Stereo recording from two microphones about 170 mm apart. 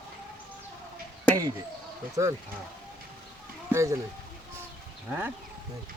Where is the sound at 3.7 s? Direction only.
15° right (ahead or behind).